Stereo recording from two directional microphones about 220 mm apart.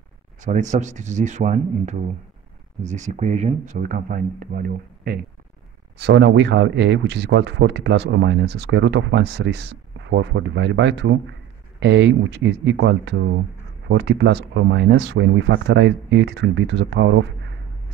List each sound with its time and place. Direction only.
0.4 s speech: 35° right (ahead or behind); by 17.3 s 55° right (ahead or behind)